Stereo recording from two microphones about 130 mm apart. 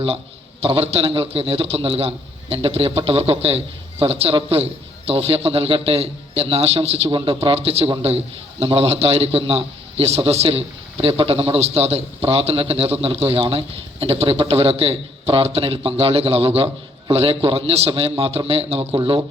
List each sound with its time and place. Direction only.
0.6 s a man's voice: 50° right (ahead or behind)